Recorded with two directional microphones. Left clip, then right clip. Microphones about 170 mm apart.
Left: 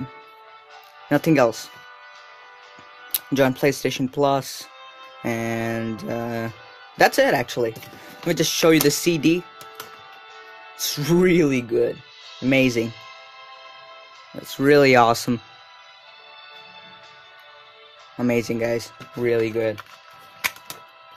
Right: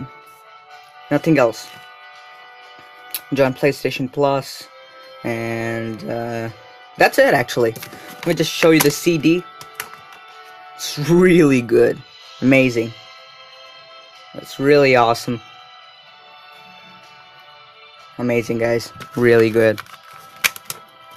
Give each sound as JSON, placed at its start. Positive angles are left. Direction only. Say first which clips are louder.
{"t": 1.0, "sound": "speech", "louder": "right 3 dB", "side_deg": 10}
{"t": 3.3, "sound": "speech", "louder": "right 3 dB", "side_deg": 5}
{"t": 5.2, "sound": "music", "louder": "right 2 dB", "side_deg": 0}
{"t": 7.4, "sound": "speech", "louder": "right 6 dB", "side_deg": -20}
{"t": 8.2, "sound": "speech", "louder": "right 3 dB", "side_deg": 0}
{"t": 10.8, "sound": "speech", "louder": "even", "side_deg": 15}
{"t": 11.1, "sound": "speech", "louder": "right 6 dB", "side_deg": -10}
{"t": 11.6, "sound": "speech", "louder": "right 7 dB", "side_deg": -30}
{"t": 12.4, "sound": "music", "louder": "right 5 dB", "side_deg": -5}
{"t": 14.5, "sound": "speech", "louder": "right 2 dB", "side_deg": 10}
{"t": 18.1, "sound": "music", "louder": "right 3 dB", "side_deg": 0}
{"t": 19.1, "sound": "speech", "louder": "right 8 dB", "side_deg": -30}